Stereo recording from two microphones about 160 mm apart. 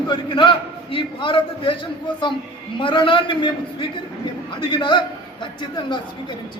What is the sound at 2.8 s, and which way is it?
A man's voice, 30° left (ahead or behind).